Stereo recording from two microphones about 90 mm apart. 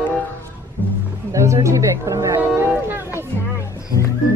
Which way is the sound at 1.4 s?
35° right (ahead or behind).